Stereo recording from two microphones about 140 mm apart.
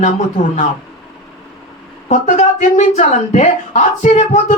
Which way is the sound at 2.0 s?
60° left (ahead or behind).